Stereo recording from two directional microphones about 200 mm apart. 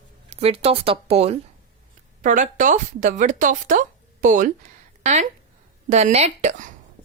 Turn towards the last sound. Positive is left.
turn(degrees=-35)  # may be behind; listen again after turning